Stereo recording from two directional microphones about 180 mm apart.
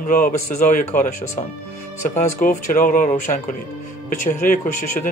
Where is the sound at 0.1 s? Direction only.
50° left (ahead or behind).